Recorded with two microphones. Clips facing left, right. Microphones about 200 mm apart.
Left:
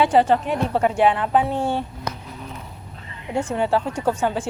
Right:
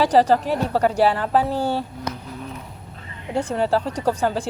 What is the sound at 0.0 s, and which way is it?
Speech, 35° right (ahead or behind).